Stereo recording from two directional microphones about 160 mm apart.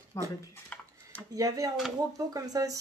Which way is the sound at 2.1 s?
20° right (ahead or behind).